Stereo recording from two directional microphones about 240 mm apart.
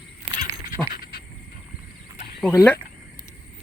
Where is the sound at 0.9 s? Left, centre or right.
Left.